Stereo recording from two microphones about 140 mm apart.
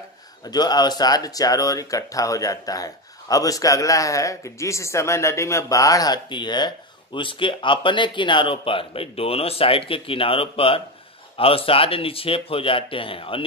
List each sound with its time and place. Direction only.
0.5 s speech: 30° left (ahead or behind)